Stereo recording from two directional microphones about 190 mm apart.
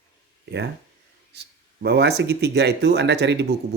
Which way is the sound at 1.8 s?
60° right (ahead or behind).